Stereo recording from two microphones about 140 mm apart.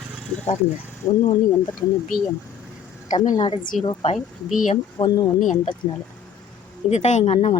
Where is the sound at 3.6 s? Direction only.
75° left (ahead or behind).